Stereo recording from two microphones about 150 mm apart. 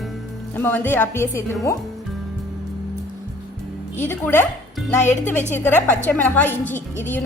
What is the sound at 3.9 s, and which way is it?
Speech, 15° left (ahead or behind).